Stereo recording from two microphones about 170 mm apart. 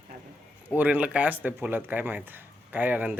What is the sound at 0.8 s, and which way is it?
Speech, 10° right (ahead or behind).